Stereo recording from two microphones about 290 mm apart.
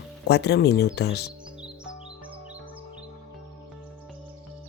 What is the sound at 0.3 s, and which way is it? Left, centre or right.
Speech, left.